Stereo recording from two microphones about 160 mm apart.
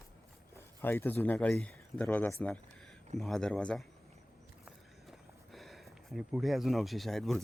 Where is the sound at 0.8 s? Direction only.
15° left (ahead or behind).